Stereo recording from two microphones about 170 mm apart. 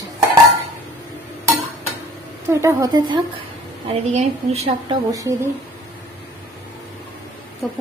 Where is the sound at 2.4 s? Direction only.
20° right (ahead or behind); by 4.6 s 35° right (ahead or behind).